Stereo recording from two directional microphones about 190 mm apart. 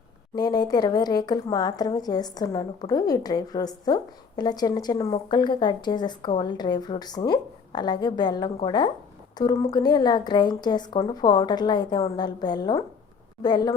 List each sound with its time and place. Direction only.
0.3 s a woman's voice: 20° left (ahead or behind)